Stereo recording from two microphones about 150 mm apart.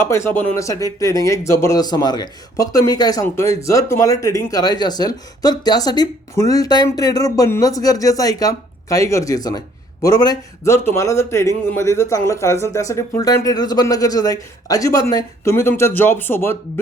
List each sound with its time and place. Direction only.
0.0 s speech: 15° left (ahead or behind)